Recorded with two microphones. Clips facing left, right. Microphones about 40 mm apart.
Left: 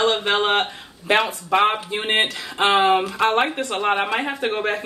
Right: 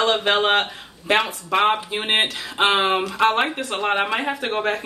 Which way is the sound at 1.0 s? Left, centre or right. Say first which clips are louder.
Left 1 dB; centre.